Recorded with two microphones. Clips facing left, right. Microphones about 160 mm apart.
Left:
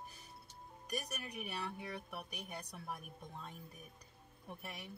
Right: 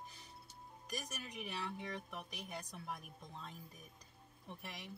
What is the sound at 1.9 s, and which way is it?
Speech, 10° left (ahead or behind).